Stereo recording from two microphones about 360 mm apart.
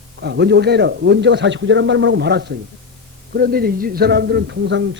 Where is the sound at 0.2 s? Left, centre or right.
Right.